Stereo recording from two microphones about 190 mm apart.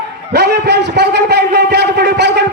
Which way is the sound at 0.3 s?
60° right (ahead or behind).